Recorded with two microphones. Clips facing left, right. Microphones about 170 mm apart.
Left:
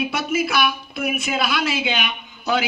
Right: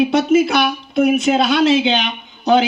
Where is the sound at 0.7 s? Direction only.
35° right (ahead or behind).